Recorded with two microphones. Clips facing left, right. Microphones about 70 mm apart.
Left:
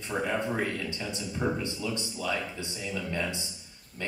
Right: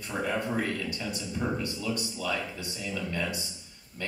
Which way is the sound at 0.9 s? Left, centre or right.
Left.